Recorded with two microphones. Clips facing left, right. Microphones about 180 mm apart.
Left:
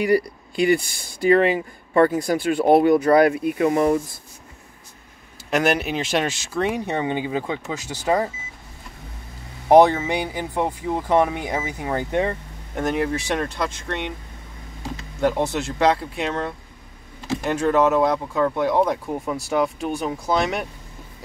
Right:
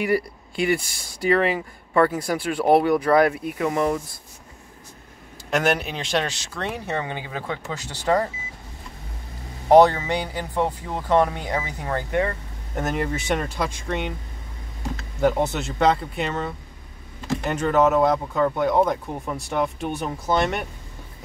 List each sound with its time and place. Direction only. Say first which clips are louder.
0.0 s speech: left 3 dB; centre (ahead or behind)
2.0 s speech: left 3 dB; 20° left (ahead or behind)
3.7 s speech: left 3 dB; 40° left (ahead or behind)
5.5 s speech: left 2 dB; centre (ahead or behind)
9.7 s speech: left 1 dB; 15° left (ahead or behind)
12.7 s speech: left 3 dB; centre (ahead or behind)
15.1 s speech: even; centre (ahead or behind)